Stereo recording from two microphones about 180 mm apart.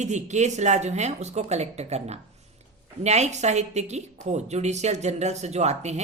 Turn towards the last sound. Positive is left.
turn(degrees=-40)  # may be behind; listen again after turning